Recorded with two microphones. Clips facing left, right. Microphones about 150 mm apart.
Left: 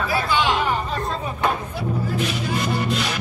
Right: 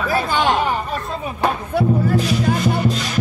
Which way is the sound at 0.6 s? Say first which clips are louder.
Right 2 dB; 20° right (ahead or behind).